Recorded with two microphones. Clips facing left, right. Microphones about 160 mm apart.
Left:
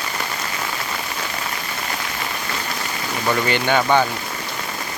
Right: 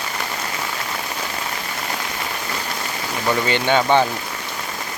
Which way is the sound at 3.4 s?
20° right (ahead or behind).